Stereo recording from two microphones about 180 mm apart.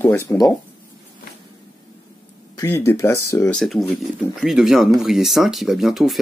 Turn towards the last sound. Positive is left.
turn(degrees=0)  # may be behind; listen again after turning